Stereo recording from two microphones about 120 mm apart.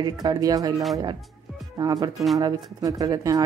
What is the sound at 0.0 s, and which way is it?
A woman's voice, 30° right (ahead or behind).